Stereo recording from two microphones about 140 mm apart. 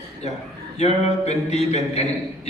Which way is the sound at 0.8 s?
50° left (ahead or behind).